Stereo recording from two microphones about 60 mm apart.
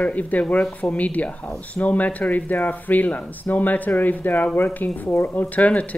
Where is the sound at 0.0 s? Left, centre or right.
Left.